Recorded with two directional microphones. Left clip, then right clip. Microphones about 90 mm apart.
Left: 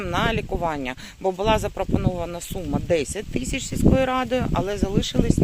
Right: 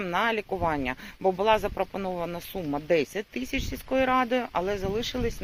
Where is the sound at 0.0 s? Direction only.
35° left (ahead or behind).